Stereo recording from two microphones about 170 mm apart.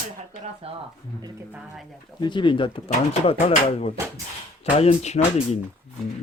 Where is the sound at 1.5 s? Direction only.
5° right (ahead or behind).